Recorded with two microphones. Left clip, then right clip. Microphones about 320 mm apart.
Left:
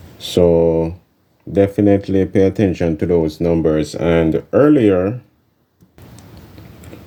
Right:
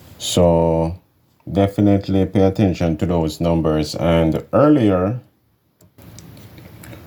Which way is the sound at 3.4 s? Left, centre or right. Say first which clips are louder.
Left 3 dB; right.